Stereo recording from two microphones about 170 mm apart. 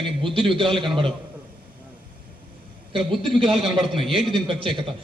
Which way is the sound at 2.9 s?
30° right (ahead or behind).